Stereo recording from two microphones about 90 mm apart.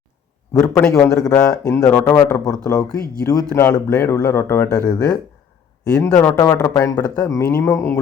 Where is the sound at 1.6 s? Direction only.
35° left (ahead or behind).